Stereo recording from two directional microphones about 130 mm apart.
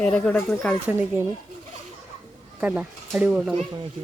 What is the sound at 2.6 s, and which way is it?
Speech, 10° right (ahead or behind).